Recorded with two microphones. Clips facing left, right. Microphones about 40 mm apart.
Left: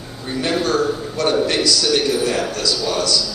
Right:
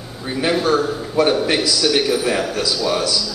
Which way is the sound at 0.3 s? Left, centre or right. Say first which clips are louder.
Right 2 dB; centre.